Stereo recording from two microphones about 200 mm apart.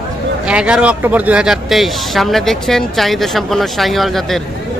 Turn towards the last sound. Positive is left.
turn(degrees=0)  # may be behind; listen again after turning